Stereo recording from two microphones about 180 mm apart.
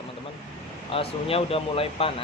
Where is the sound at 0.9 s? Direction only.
30° left (ahead or behind).